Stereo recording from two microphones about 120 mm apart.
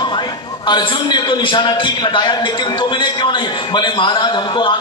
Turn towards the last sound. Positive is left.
turn(degrees=40)  # may be behind; listen again after turning